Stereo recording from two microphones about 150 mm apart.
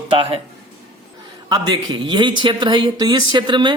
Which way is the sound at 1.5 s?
25° right (ahead or behind).